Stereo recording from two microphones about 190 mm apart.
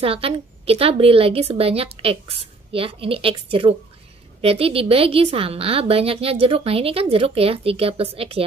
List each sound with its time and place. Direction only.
0.0 s a woman's voice: 30° right (ahead or behind)